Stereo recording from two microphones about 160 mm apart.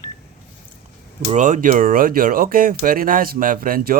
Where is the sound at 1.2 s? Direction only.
50° right (ahead or behind).